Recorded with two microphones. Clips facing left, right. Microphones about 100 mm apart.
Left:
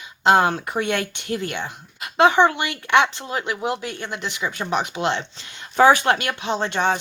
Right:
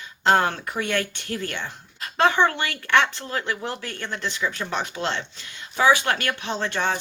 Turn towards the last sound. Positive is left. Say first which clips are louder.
# left 4 dB
turn(degrees=20)  # may be behind; listen again after turning